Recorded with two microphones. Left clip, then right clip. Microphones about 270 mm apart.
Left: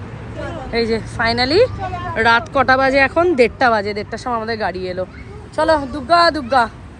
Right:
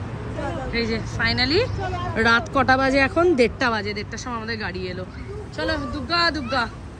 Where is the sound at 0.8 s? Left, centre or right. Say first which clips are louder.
Left 6 dB; centre.